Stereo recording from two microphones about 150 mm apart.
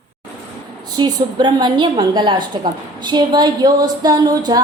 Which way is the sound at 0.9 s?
30° right (ahead or behind).